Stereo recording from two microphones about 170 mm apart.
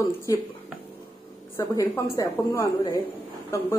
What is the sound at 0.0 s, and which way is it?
Speech, 20° left (ahead or behind).